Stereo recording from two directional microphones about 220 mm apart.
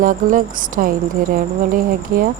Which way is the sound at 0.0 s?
35° right (ahead or behind).